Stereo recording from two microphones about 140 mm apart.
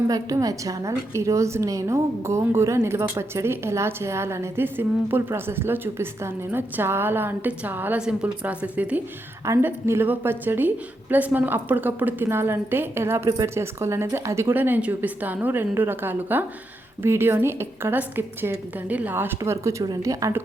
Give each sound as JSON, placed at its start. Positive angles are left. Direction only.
{"t": 0.1, "sound": "a woman's voice", "side_deg": -25}